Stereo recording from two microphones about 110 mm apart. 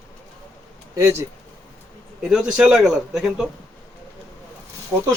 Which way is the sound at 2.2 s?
5° right (ahead or behind).